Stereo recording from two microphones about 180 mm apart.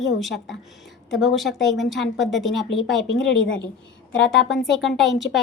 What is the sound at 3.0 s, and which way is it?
Speech, 90° left.